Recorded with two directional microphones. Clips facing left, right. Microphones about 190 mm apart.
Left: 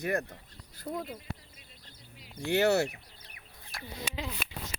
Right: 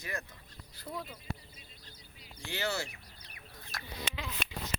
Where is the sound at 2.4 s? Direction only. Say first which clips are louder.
Left 11 dB; 65° left (ahead or behind).